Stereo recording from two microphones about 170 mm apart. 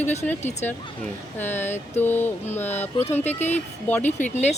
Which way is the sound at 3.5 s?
10° left (ahead or behind).